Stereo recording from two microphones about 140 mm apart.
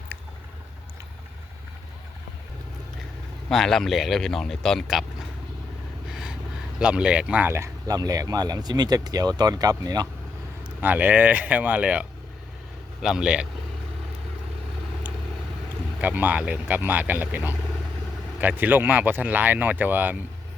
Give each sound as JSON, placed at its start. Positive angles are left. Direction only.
{"t": 3.5, "sound": "speech", "side_deg": 5}
{"t": 6.1, "sound": "a sound", "side_deg": -5}
{"t": 6.7, "sound": "speech", "side_deg": -5}
{"t": 10.8, "sound": "speech", "side_deg": -10}
{"t": 16.0, "sound": "speech", "side_deg": -10}